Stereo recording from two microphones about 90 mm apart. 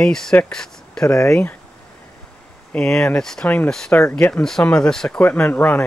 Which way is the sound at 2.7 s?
5° left (ahead or behind).